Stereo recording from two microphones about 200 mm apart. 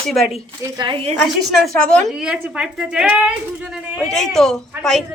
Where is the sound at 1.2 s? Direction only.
Centre (ahead or behind).